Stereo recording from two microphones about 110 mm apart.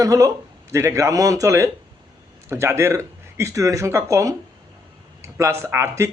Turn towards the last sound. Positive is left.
turn(degrees=-25)  # may be behind; listen again after turning